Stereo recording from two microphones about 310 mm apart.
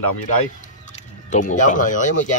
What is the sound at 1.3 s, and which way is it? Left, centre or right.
Speech, left.